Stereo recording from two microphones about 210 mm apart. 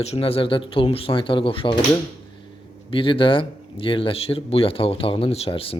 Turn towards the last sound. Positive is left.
turn(degrees=25)  # may be behind; listen again after turning